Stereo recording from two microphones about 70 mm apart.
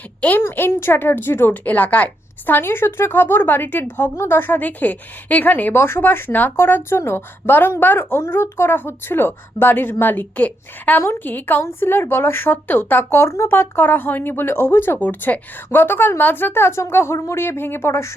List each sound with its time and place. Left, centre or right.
0.2 s a woman's voice: left
2.6 s a woman's voice: left
13.5 s speech: left